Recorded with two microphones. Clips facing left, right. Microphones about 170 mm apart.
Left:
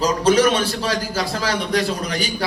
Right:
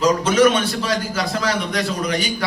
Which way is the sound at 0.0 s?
35° left (ahead or behind).